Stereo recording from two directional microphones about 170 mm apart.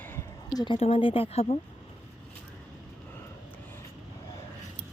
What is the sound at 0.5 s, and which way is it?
Speech, 30° left (ahead or behind).